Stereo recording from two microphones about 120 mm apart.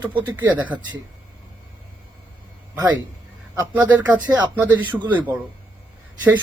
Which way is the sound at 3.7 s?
15° right (ahead or behind).